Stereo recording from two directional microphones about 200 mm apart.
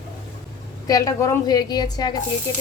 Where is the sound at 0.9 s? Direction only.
15° left (ahead or behind).